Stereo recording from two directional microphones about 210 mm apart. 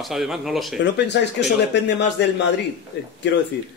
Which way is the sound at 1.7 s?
55° left (ahead or behind).